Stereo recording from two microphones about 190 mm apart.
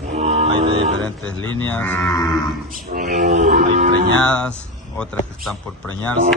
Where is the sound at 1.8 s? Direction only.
10° left (ahead or behind).